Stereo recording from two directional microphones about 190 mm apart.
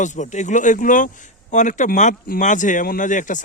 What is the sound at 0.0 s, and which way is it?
A man's voice, 40° left (ahead or behind).